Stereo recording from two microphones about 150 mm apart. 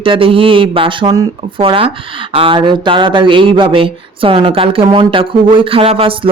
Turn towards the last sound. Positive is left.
turn(degrees=-40)  # may be behind; listen again after turning